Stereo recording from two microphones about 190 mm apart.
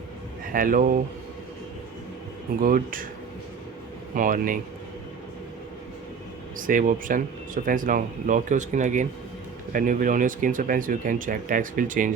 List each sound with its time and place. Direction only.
0.4 s speech: 45° right (ahead or behind)
2.6 s speech: 45° right (ahead or behind)
4.1 s speech: 45° right (ahead or behind)
6.6 s speech: 45° right (ahead or behind)